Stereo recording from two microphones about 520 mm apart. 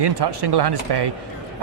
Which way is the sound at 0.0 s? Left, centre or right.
Right.